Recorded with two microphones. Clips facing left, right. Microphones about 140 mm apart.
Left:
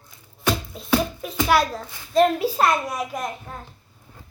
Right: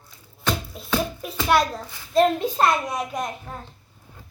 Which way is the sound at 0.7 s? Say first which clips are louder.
Left 3 dB; centre (ahead or behind).